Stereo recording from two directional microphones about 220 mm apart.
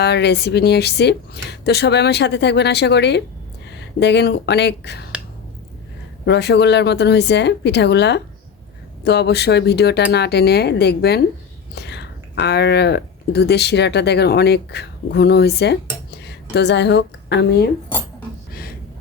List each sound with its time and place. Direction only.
0.0 s speech: 50° left (ahead or behind)
6.2 s speech: 50° left (ahead or behind)